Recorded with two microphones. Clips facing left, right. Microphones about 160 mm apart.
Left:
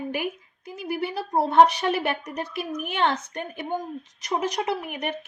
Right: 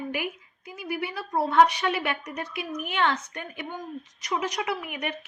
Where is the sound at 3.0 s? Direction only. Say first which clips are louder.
Left 2 dB; 40° left (ahead or behind).